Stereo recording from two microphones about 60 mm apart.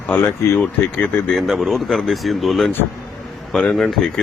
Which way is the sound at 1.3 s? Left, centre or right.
Centre.